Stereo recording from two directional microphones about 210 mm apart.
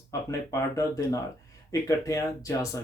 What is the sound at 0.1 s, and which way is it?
Speech, 15° left (ahead or behind).